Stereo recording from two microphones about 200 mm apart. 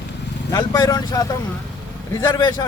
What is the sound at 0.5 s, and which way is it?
A man's voice, 20° left (ahead or behind).